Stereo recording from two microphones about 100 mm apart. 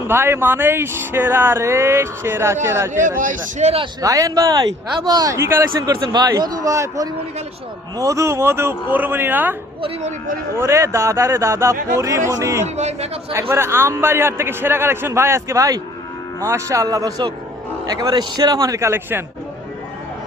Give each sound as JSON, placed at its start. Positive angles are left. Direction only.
{"t": 0.1, "sound": "speech", "side_deg": -25}
{"t": 3.6, "sound": "speech", "side_deg": -90}
{"t": 4.0, "sound": "speech", "side_deg": -35}
{"t": 6.1, "sound": "speech", "side_deg": -45}
{"t": 10.6, "sound": "speech", "side_deg": -30}
{"t": 12.6, "sound": "speech", "side_deg": -90}
{"t": 13.5, "sound": "speech", "side_deg": -25}